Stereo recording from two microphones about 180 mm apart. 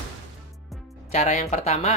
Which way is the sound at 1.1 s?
40° left (ahead or behind).